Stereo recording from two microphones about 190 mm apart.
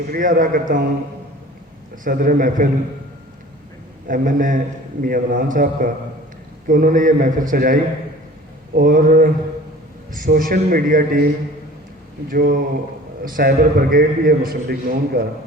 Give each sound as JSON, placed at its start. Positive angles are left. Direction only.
{"t": 0.1, "sound": "a man's voice", "side_deg": -45}
{"t": 2.0, "sound": "a man's voice", "side_deg": -45}
{"t": 4.0, "sound": "a man's voice", "side_deg": -45}
{"t": 12.3, "sound": "a man's voice", "side_deg": -50}